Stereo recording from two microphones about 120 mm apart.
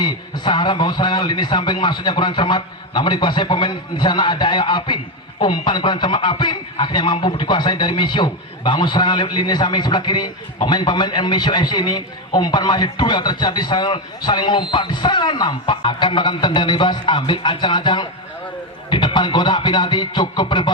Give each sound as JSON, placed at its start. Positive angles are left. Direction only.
{"t": 0.0, "sound": "a man's voice", "side_deg": 40}